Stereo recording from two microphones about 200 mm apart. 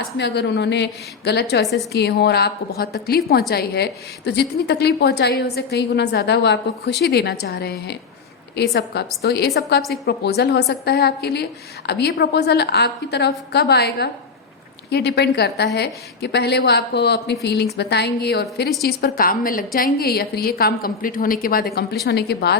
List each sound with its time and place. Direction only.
0.2 s a woman's voice: 60° left (ahead or behind)